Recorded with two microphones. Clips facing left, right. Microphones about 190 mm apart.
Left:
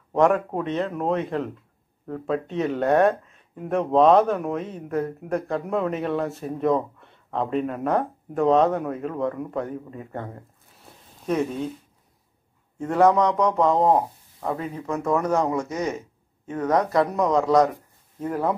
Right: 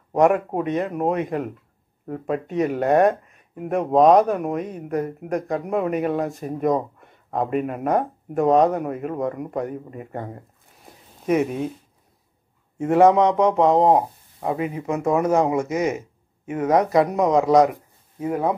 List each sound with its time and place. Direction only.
0.1 s speech: 15° right (ahead or behind)
12.7 s speech: 20° right (ahead or behind)